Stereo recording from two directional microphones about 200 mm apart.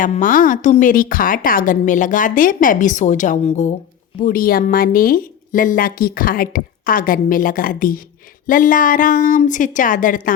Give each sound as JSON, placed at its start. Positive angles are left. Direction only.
{"t": 0.0, "sound": "a woman's voice", "side_deg": 40}
{"t": 4.2, "sound": "a woman's voice", "side_deg": 45}